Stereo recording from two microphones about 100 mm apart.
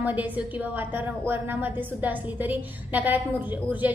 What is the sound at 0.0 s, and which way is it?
A woman's voice, 15° right (ahead or behind).